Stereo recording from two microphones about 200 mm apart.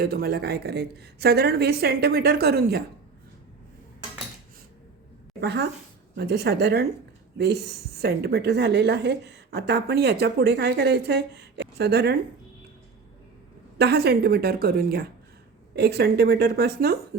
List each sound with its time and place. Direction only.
0.0 s a woman's voice: 50° right (ahead or behind)
5.4 s a woman's voice: 55° right (ahead or behind)
13.7 s a woman's voice: 55° right (ahead or behind)